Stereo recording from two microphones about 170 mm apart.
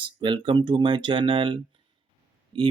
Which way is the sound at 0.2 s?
30° right (ahead or behind).